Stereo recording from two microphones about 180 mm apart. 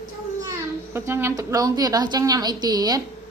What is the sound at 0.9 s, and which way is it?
A woman's voice, 15° right (ahead or behind).